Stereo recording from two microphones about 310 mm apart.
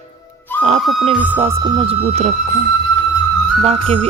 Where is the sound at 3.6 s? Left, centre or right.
Centre.